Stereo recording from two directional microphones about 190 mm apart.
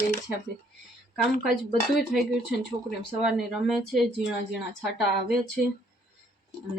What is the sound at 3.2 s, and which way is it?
A woman's voice, centre (ahead or behind).